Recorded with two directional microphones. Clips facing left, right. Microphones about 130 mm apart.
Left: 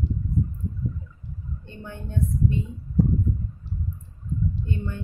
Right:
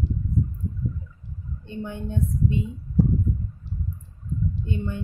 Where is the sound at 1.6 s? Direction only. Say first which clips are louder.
Right 9 dB; 20° right (ahead or behind).